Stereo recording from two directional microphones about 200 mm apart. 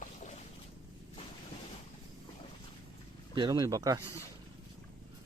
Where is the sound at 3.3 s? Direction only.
20° right (ahead or behind).